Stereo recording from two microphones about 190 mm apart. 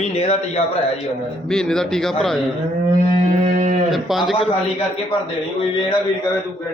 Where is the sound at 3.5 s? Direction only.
45° right (ahead or behind).